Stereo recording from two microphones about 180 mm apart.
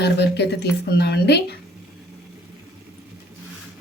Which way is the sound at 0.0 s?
70° left (ahead or behind).